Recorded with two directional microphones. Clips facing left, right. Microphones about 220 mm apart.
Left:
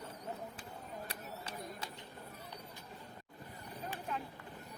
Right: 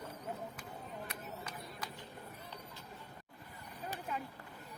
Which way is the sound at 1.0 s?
30° left (ahead or behind).